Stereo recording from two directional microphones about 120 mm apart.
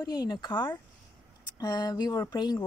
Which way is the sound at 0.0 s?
35° left (ahead or behind).